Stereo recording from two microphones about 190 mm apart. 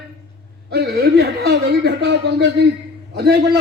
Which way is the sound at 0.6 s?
60° right (ahead or behind).